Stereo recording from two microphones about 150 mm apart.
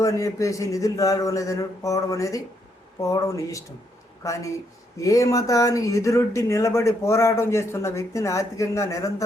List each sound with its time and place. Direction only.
0.0 s speech: 20° left (ahead or behind)